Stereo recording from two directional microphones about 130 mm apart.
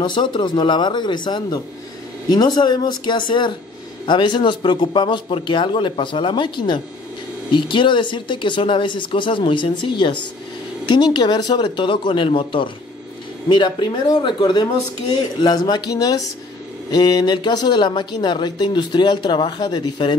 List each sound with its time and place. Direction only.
0.0 s speech: 35° left (ahead or behind)